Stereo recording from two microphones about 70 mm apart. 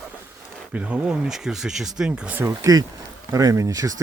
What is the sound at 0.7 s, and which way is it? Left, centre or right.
Speech, centre.